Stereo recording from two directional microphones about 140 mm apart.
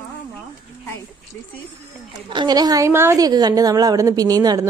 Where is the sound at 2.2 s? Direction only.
30° right (ahead or behind).